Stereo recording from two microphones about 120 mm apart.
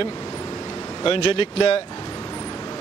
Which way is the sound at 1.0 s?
50° left (ahead or behind).